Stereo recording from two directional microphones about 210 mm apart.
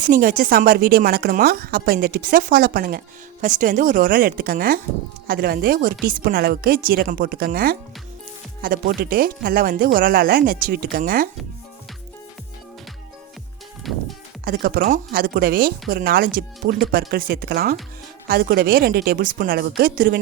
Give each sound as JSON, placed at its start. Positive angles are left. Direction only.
{"t": 0.1, "sound": "speech", "side_deg": -40}
{"t": 13.8, "sound": "music", "side_deg": 0}
{"t": 14.4, "sound": "speech", "side_deg": -45}